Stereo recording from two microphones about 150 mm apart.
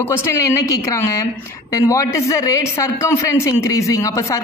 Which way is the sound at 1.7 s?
20° left (ahead or behind).